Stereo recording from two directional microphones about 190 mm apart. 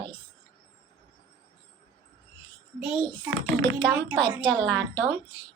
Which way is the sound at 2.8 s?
10° right (ahead or behind).